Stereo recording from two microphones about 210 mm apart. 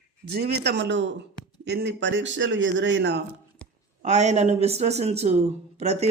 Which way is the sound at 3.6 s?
5° left (ahead or behind).